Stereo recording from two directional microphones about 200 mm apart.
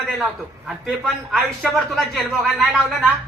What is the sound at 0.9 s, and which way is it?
Speech, centre (ahead or behind).